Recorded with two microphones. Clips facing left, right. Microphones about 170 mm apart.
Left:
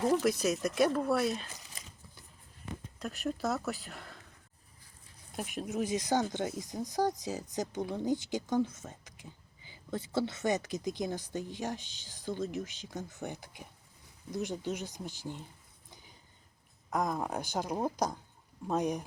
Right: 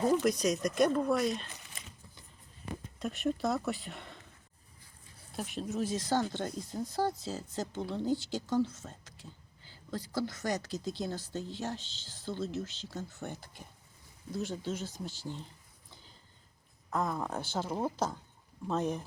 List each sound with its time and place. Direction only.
0.1 s speech: 5° left (ahead or behind)
3.0 s speech: centre (ahead or behind)
5.4 s speech: 10° left (ahead or behind)
16.9 s speech: 15° left (ahead or behind)